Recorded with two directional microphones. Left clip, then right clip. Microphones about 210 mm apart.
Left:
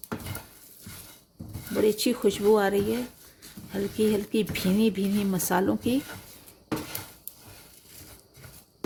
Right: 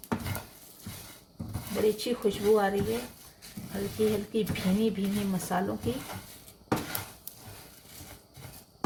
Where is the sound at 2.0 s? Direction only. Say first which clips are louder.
Left 4 dB; 55° left (ahead or behind).